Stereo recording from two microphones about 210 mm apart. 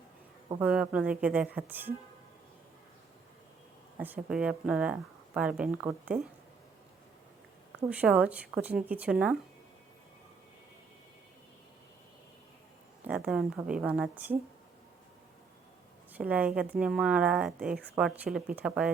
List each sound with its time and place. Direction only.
0.6 s speech: 5° right (ahead or behind)
3.9 s speech: 10° right (ahead or behind)
7.8 s speech: 5° right (ahead or behind)
13.0 s speech: 5° right (ahead or behind)
16.1 s speech: 5° right (ahead or behind)